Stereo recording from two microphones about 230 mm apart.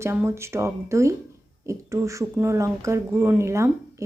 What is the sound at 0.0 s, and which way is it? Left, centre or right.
A woman's voice, centre.